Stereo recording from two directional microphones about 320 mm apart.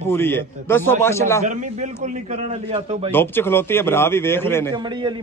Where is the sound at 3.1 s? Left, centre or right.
Centre.